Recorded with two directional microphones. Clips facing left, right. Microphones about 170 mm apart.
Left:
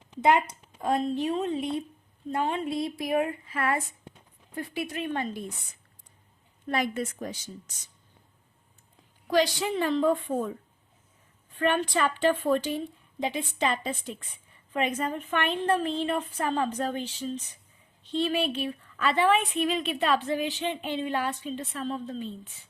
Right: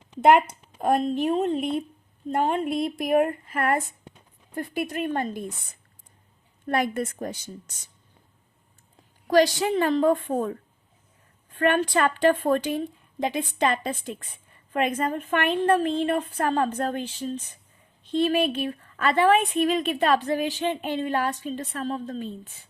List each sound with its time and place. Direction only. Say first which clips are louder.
0.2 s a woman's voice: right 5 dB; 65° right (ahead or behind); by 5.5 s 45° right (ahead or behind)
6.7 s a woman's voice: right 3 dB; 55° right (ahead or behind)
9.2 s a woman's voice: right 5 dB; 45° right (ahead or behind)
11.6 s a woman's voice: right 4 dB; 50° right (ahead or behind)